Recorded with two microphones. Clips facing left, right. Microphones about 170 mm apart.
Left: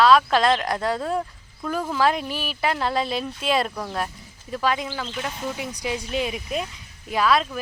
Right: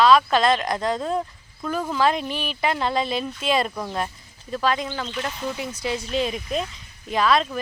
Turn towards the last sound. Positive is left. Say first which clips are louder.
# right 1 dB
turn(degrees=10)  # may be behind; listen again after turning